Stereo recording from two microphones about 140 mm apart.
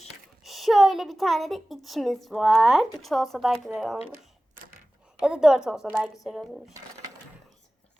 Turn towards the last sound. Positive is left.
turn(degrees=0)  # may be behind; listen again after turning